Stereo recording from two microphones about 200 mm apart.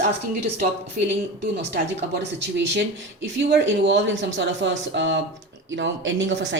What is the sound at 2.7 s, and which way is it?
Speech, 60° right (ahead or behind).